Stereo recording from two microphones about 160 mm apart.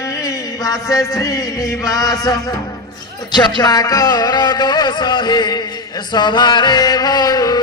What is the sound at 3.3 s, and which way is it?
Music, 25° left (ahead or behind).